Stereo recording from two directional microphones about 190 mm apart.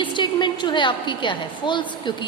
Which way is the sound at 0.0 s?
25° left (ahead or behind).